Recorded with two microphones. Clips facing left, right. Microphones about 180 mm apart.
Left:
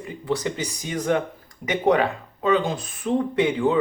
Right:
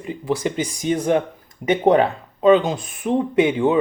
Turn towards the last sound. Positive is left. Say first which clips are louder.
# right 4 dB
turn(degrees=-25)  # may be behind; listen again after turning